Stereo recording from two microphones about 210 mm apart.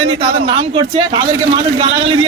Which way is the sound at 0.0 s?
25° right (ahead or behind).